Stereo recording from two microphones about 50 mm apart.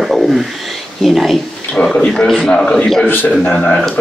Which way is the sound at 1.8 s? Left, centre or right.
Left.